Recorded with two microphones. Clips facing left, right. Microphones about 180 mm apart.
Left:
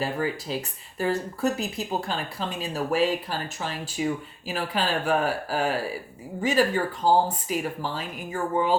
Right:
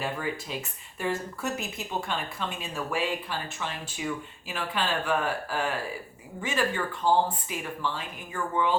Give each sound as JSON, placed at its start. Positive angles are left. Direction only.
{"t": 0.0, "sound": "speech", "side_deg": 35}